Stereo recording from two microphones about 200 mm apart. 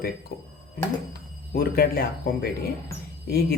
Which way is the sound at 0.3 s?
50° left (ahead or behind).